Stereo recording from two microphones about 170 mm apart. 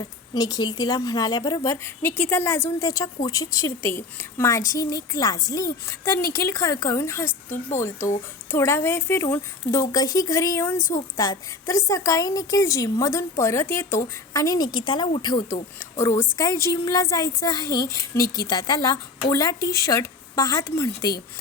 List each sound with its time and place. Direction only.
0.0 s a woman's voice: 20° left (ahead or behind)
15.8 s a woman's voice: 15° left (ahead or behind)